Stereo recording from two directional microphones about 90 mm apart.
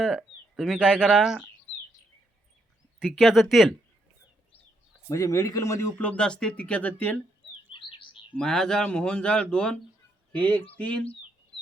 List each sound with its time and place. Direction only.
0.0 s speech: 5° right (ahead or behind)
3.0 s speech: 5° right (ahead or behind)
5.0 s speech: 40° left (ahead or behind)
6.0 s speech: 10° left (ahead or behind)
7.7 s bird: 70° left (ahead or behind)
8.4 s speech: 5° left (ahead or behind)